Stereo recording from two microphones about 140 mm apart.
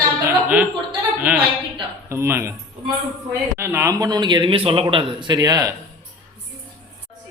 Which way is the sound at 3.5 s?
15° right (ahead or behind).